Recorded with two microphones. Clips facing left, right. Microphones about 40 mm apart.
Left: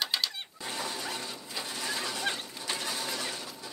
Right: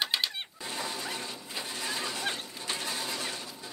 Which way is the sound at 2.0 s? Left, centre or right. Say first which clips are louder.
Left 1 dB; right.